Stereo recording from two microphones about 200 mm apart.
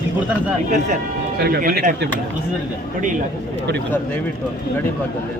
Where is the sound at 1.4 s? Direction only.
50° right (ahead or behind).